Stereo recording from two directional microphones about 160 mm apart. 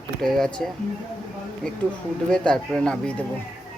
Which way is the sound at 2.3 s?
5° left (ahead or behind).